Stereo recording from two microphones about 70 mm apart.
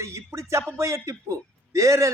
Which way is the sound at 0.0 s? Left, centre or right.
Right.